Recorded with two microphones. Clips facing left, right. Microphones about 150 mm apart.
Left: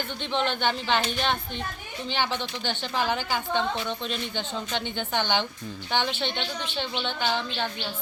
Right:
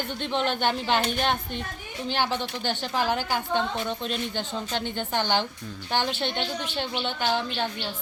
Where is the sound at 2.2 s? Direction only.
10° right (ahead or behind).